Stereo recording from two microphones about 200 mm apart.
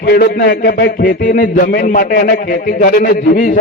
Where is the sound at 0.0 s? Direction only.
50° left (ahead or behind).